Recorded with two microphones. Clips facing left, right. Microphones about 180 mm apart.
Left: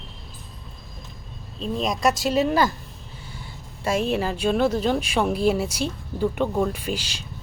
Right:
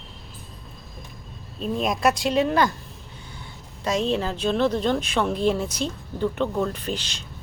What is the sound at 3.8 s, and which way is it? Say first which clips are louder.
Speech: left 1 dB; 10° left (ahead or behind).